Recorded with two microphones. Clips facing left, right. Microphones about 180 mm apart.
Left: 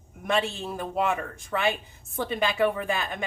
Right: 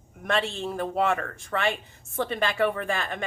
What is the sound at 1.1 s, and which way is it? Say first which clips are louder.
Speech: right 1 dB; 10° left (ahead or behind).